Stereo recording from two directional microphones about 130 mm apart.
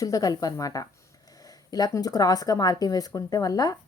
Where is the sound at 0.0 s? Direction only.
25° left (ahead or behind).